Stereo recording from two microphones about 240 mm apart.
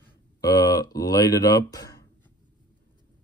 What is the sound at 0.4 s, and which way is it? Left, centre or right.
Speech, centre.